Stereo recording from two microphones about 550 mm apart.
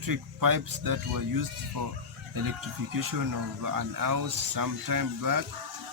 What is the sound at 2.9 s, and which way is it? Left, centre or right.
Speech, right.